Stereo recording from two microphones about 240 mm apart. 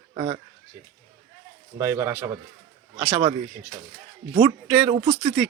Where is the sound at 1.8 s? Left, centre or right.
Centre.